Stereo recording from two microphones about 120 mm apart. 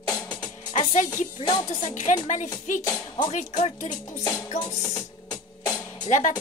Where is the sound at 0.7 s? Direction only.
75° left (ahead or behind).